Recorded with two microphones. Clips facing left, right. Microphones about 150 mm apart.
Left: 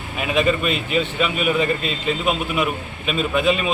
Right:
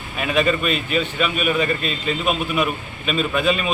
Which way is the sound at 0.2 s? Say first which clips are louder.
Even; 20° left (ahead or behind).